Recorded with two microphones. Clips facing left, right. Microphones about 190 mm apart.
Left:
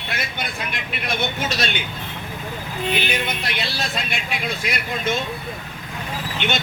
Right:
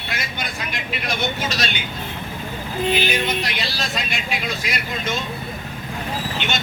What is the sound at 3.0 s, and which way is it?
Speech, 55° left (ahead or behind).